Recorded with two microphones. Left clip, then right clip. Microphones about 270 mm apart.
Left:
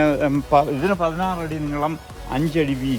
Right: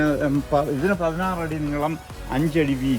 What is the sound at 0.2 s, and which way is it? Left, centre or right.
Speech, centre.